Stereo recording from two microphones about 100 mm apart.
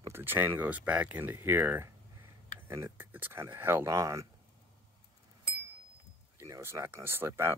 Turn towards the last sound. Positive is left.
turn(degrees=-25)  # may be behind; listen again after turning